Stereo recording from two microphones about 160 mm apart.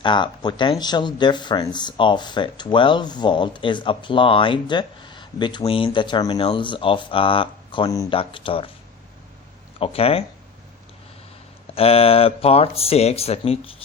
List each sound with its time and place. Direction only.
0.0 s speech: 30° left (ahead or behind)
9.7 s speech: 35° left (ahead or behind)
11.7 s speech: 35° left (ahead or behind)